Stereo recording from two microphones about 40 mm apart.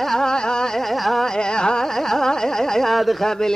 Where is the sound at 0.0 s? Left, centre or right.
Centre.